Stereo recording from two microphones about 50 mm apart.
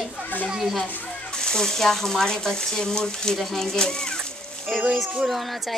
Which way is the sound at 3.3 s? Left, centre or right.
Centre.